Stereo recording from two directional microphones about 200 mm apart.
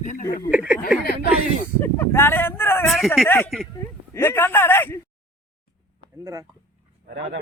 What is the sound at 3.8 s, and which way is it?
Speech, 10° left (ahead or behind).